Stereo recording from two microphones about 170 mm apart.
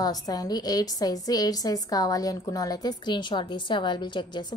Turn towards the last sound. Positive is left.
turn(degrees=25)  # may be behind; listen again after turning